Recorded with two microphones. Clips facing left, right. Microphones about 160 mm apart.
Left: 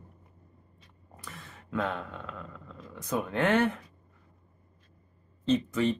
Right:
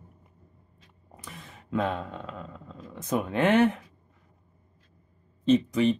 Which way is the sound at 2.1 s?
25° right (ahead or behind).